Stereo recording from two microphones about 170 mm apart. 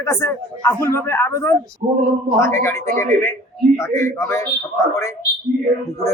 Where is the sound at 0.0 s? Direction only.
20° left (ahead or behind).